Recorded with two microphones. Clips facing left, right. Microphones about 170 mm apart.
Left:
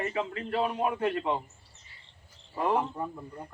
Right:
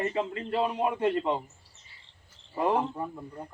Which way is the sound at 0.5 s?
10° right (ahead or behind).